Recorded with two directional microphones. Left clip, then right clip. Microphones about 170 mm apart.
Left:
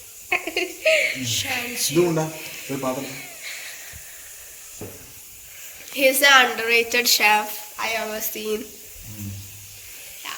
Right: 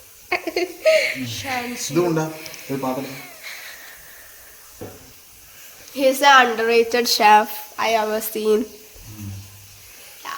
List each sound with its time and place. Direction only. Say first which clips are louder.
0.3 s a woman's voice: right 1 dB; 35° right (ahead or behind)
1.5 s speech: right 1 dB; 10° right (ahead or behind)
2.1 s a sound: right 1 dB; 15° right (ahead or behind)
5.9 s a woman's voice: right 2 dB; 45° right (ahead or behind)
7.8 s speech: right 6 dB; 70° right (ahead or behind)